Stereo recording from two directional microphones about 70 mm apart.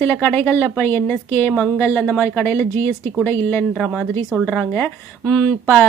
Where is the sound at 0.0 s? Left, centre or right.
Left.